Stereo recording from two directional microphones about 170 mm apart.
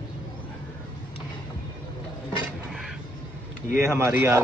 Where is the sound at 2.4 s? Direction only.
Centre (ahead or behind).